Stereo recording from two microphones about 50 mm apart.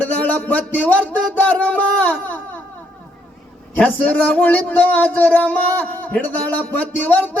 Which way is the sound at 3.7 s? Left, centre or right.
Left.